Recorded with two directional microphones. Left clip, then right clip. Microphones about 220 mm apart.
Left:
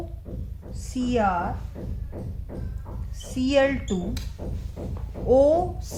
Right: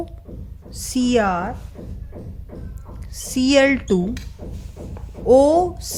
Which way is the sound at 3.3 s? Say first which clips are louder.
Right 6 dB; 40° right (ahead or behind).